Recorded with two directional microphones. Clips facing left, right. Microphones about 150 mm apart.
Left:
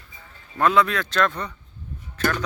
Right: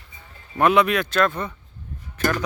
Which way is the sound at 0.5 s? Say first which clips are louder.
Right 2 dB; 15° right (ahead or behind).